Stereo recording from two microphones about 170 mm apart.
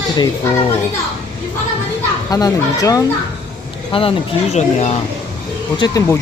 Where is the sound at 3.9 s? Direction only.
30° left (ahead or behind).